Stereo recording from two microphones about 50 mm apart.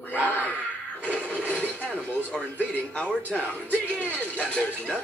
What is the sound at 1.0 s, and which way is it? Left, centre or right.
Speech, left.